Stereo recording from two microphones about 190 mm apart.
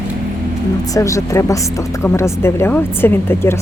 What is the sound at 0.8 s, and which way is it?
Speech, 15° left (ahead or behind).